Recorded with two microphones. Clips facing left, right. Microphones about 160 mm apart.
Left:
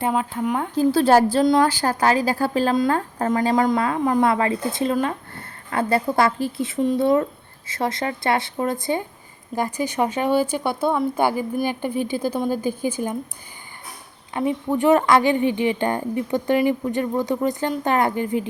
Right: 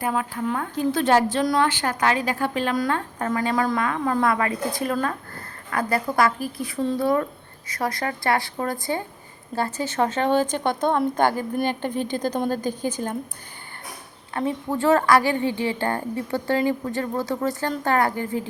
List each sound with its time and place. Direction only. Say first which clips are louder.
0.0 s a woman's voice: left 3 dB; 25° left (ahead or behind)
0.8 s a woman's voice: left 4 dB; 35° left (ahead or behind); by 13.1 s 10° left (ahead or behind)
14.3 s a woman's voice: left 3 dB; 15° left (ahead or behind)